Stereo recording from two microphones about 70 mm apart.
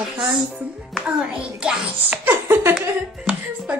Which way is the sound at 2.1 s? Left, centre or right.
Right.